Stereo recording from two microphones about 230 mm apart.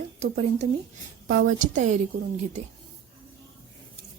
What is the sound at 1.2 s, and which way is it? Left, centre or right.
Speech, right.